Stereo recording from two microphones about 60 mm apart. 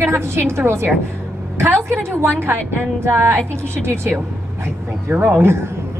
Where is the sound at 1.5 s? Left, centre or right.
Right.